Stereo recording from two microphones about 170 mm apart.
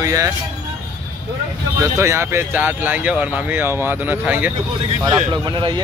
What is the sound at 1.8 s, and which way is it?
Speech, 15° right (ahead or behind).